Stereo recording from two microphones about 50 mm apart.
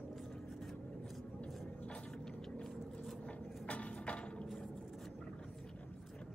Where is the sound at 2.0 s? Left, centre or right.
Centre.